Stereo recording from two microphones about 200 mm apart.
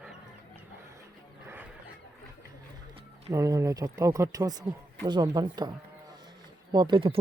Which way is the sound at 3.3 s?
15° right (ahead or behind).